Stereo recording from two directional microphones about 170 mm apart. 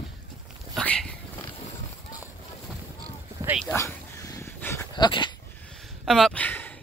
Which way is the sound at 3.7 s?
15° left (ahead or behind).